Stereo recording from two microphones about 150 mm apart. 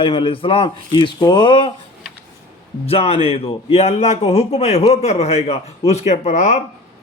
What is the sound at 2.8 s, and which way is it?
A man's voice, 40° left (ahead or behind).